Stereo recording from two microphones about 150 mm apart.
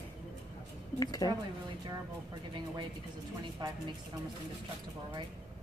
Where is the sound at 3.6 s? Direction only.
30° right (ahead or behind).